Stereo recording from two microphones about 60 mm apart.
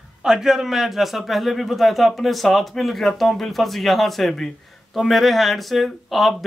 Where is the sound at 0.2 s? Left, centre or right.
Centre.